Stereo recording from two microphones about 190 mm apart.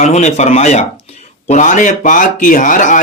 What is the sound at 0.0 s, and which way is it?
Speech, 35° left (ahead or behind).